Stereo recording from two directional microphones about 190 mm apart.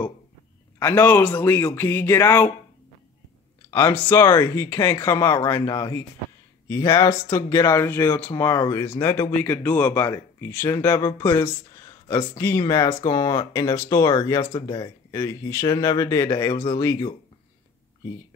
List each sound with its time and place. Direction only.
0.7 s speech: 10° left (ahead or behind)
3.7 s speech: 10° left (ahead or behind)